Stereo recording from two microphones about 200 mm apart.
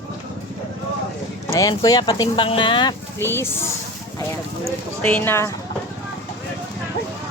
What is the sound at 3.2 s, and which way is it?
Speech, 10° left (ahead or behind).